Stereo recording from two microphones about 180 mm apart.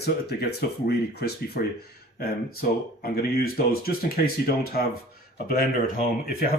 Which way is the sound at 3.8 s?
60° left (ahead or behind).